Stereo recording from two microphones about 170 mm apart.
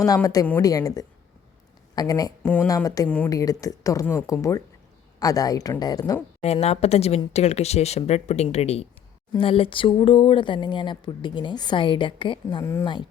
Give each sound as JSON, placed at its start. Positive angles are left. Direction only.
{"t": 0.0, "sound": "speech", "side_deg": 20}
{"t": 2.4, "sound": "speech", "side_deg": 10}
{"t": 2.6, "sound": "speech", "side_deg": 20}
{"t": 6.4, "sound": "speech", "side_deg": 40}